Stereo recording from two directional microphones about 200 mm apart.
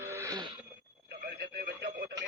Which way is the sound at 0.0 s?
15° right (ahead or behind).